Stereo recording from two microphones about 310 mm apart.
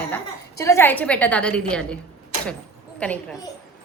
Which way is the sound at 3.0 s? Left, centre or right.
Centre.